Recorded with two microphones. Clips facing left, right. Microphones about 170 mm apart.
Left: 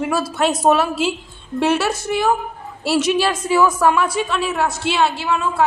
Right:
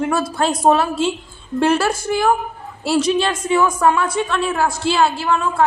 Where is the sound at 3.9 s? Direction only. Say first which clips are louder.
Even; 25° right (ahead or behind).